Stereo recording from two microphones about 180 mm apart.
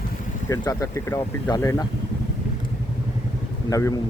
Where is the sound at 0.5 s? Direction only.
20° left (ahead or behind).